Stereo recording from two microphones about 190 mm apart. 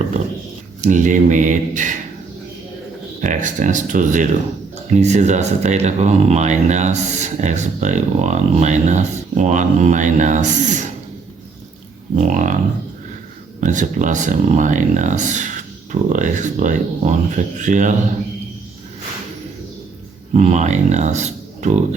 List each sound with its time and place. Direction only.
0.8 s speech: 40° right (ahead or behind)
3.2 s speech: 40° right (ahead or behind)
12.1 s speech: 40° right (ahead or behind)
13.6 s speech: 40° right (ahead or behind)
20.3 s speech: 35° right (ahead or behind)